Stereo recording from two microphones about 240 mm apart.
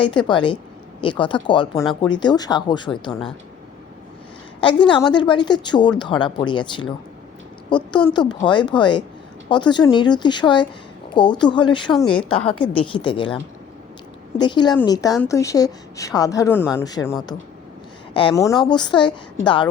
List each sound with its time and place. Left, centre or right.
0.0 s a woman's voice: centre
4.9 s a woman's voice: centre
12.0 s a woman's voice: centre
12.7 s a woman's voice: left
14.3 s a woman's voice: centre